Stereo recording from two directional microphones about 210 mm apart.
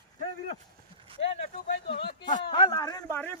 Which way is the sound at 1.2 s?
30° left (ahead or behind).